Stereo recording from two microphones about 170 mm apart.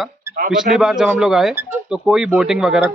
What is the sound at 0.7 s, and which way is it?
A man's voice, 5° right (ahead or behind).